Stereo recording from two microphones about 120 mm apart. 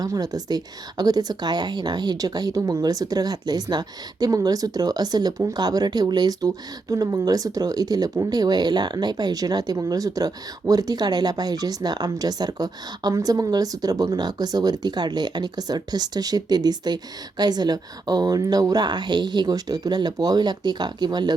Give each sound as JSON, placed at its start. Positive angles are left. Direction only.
{"t": 0.0, "sound": "speech", "side_deg": -30}